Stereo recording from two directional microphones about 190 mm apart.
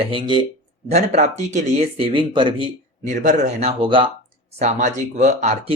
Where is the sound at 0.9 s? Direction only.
35° right (ahead or behind).